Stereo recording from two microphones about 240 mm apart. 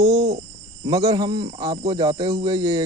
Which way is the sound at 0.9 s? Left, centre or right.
Centre.